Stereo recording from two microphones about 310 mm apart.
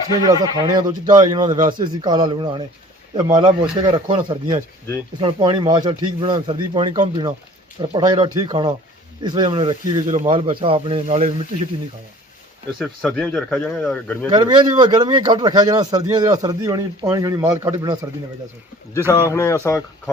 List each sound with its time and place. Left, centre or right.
0.3 s a man's voice: centre
12.8 s speech: centre
14.3 s a man's voice: centre
19.3 s speech: centre